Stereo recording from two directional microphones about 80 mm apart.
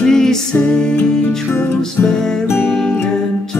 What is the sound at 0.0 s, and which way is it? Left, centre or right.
Music, centre.